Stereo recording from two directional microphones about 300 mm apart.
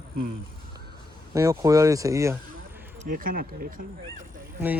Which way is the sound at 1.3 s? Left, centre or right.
Centre.